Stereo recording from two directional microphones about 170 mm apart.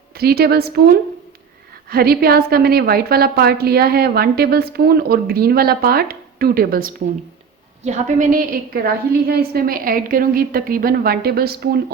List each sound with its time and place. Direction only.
0.2 s a woman's voice: 65° right (ahead or behind)
1.9 s a woman's voice: 60° right (ahead or behind)
7.9 s a woman's voice: 50° right (ahead or behind); by 11.8 s 65° right (ahead or behind)